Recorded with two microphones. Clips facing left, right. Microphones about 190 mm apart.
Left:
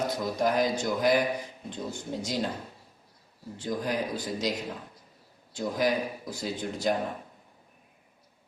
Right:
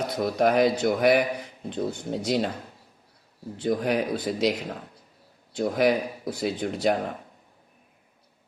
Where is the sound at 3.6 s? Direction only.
65° right (ahead or behind).